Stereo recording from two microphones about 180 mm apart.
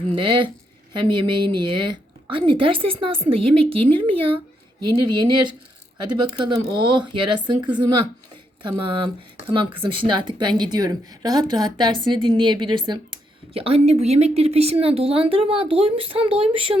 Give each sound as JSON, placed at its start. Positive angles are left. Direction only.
{"t": 0.1, "sound": "a woman's voice", "side_deg": -30}